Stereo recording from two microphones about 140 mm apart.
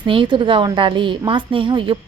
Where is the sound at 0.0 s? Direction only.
35° right (ahead or behind).